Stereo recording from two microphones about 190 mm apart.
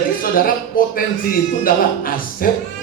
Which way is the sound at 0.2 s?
50° left (ahead or behind).